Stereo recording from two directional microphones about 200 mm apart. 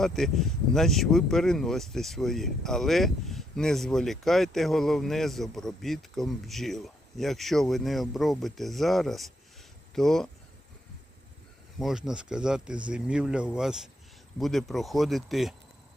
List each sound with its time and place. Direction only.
0.0 s speech: centre (ahead or behind)
11.8 s speech: centre (ahead or behind)